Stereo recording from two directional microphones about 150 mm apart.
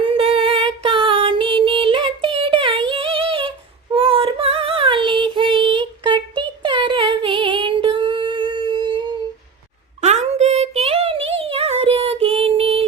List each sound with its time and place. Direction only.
0.0 s music: 40° right (ahead or behind)
3.9 s child singing: 35° right (ahead or behind)
10.0 s a sound: 50° right (ahead or behind)